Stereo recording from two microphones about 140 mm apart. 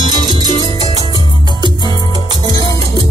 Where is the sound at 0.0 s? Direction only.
30° right (ahead or behind).